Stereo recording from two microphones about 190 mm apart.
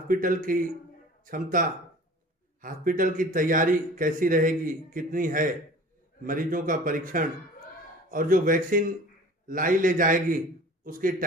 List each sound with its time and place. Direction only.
0.1 s a man's voice: 45° right (ahead or behind)